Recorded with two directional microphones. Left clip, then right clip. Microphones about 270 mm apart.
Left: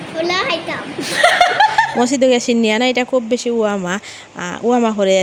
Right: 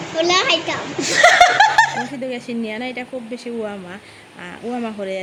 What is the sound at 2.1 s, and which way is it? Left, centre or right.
Speech, left.